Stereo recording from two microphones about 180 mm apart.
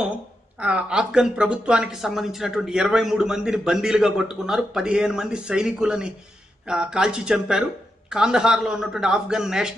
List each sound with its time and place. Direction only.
0.6 s speech: 5° right (ahead or behind)